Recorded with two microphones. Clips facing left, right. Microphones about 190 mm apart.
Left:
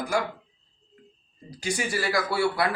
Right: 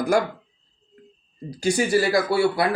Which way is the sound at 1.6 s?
25° right (ahead or behind).